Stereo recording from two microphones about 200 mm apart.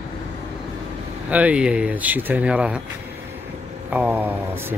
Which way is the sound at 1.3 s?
5° right (ahead or behind).